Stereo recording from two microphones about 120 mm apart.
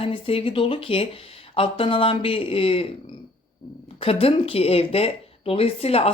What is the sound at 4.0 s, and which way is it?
Speech, 50° left (ahead or behind).